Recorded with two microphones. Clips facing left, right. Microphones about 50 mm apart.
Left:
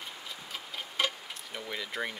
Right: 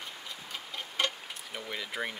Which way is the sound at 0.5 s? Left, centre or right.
Centre.